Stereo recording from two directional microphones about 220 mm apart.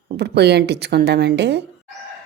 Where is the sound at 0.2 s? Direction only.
50° right (ahead or behind).